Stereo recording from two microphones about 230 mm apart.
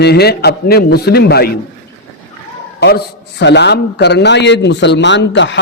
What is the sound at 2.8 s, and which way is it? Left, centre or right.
A man's voice, left.